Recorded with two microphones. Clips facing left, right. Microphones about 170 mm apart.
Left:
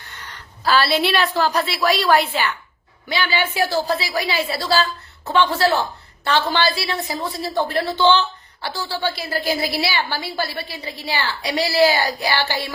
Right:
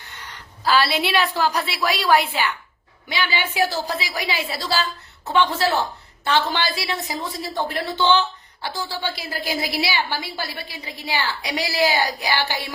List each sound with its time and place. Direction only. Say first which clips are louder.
0.6 s a woman's voice: left 2 dB; 10° right (ahead or behind)